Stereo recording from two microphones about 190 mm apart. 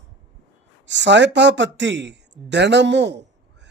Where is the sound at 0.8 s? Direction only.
70° right (ahead or behind).